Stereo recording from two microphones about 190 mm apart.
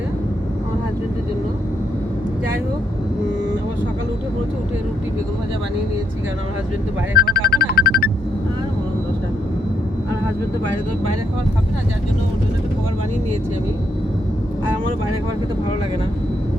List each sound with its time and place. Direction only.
7.2 s music: 55° left (ahead or behind)